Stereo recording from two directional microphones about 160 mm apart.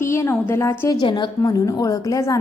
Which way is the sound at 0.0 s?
15° left (ahead or behind).